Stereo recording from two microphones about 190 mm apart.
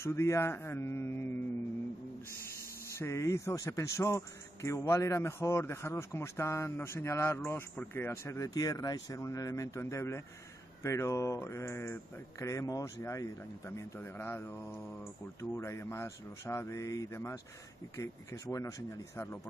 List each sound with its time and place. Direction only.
0.0 s speech: 15° left (ahead or behind)
2.9 s speech: 15° left (ahead or behind)